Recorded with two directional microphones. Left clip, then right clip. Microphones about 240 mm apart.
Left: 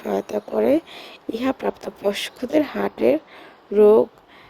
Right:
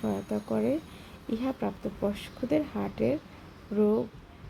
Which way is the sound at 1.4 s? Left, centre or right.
Left.